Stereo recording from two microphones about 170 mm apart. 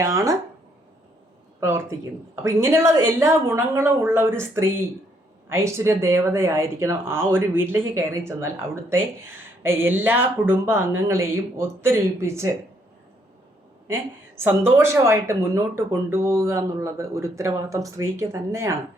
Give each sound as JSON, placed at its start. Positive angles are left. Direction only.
{"t": 0.0, "sound": "speech", "side_deg": -20}
{"t": 1.6, "sound": "speech", "side_deg": -15}
{"t": 13.8, "sound": "speech", "side_deg": -15}